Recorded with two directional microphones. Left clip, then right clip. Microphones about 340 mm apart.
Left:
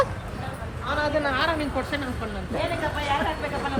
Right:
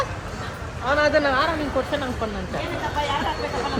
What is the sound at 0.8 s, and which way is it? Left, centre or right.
Speech, right.